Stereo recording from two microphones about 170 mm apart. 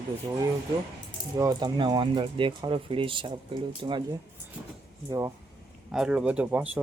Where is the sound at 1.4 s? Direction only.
20° right (ahead or behind).